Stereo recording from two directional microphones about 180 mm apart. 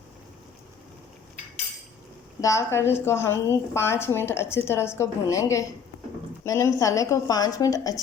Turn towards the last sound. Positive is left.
turn(degrees=20)  # may be behind; listen again after turning